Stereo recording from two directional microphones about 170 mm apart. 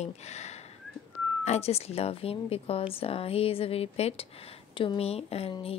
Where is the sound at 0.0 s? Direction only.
40° left (ahead or behind).